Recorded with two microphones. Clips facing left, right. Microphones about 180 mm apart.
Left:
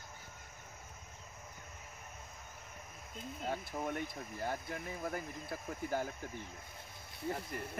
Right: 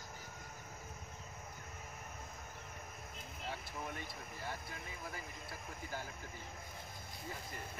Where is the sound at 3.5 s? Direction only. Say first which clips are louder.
Left 7 dB; 50° left (ahead or behind).